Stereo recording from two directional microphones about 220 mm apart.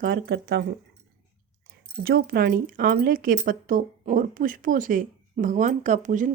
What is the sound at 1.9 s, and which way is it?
Speech, 45° right (ahead or behind).